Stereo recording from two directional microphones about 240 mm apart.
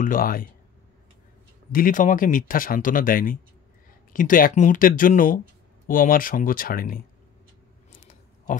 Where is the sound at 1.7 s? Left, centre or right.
Left.